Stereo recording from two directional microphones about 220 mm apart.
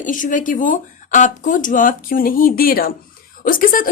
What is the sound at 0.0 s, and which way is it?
A woman's voice, 35° left (ahead or behind).